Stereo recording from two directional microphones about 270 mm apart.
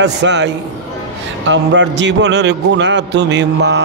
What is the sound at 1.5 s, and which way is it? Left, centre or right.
A man's voice, right.